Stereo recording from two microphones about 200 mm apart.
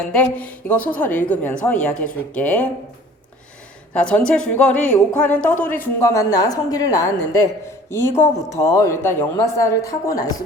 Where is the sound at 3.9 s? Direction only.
5° left (ahead or behind).